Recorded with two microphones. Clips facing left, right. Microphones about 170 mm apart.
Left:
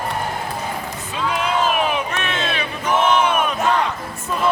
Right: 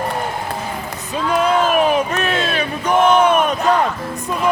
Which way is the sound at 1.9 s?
40° right (ahead or behind).